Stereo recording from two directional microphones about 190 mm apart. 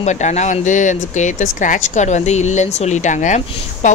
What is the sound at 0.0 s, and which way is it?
Speech, 35° left (ahead or behind).